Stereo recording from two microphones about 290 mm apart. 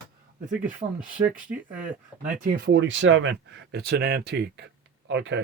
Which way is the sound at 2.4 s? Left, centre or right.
Right.